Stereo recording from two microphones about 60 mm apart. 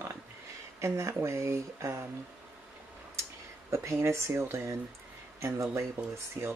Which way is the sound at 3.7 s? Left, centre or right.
Right.